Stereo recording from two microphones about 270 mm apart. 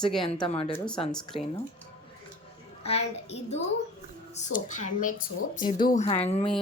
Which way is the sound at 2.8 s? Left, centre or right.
Left.